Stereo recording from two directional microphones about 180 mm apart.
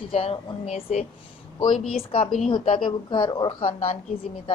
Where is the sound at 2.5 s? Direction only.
30° left (ahead or behind).